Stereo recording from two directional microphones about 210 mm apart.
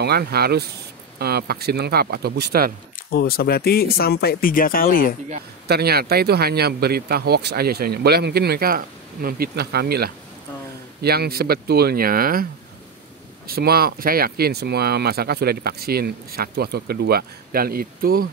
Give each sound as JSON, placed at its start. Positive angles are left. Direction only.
{"t": 0.0, "sound": "speech", "side_deg": -50}
{"t": 3.1, "sound": "speech", "side_deg": 45}
{"t": 5.7, "sound": "speech", "side_deg": -50}
{"t": 13.5, "sound": "speech", "side_deg": -45}